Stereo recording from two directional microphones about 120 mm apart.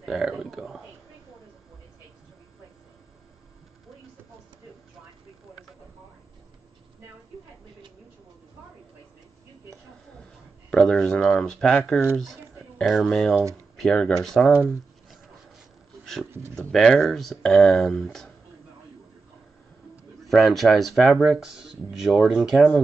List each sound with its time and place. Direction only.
0.0 s a sound: centre (ahead or behind)
10.7 s speech: 5° left (ahead or behind)
14.5 s speech: 15° right (ahead or behind)
16.5 s speech: 5° left (ahead or behind)
20.2 s speech: centre (ahead or behind)